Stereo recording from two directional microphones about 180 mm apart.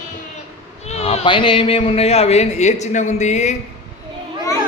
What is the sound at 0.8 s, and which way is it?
Speech, 35° left (ahead or behind).